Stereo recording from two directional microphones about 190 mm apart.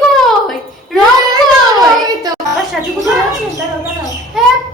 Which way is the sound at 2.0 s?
20° right (ahead or behind).